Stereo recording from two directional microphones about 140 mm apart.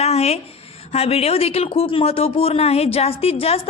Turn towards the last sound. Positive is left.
turn(degrees=45)  # may be behind; listen again after turning